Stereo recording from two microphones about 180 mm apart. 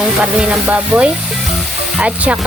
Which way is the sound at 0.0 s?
5° right (ahead or behind).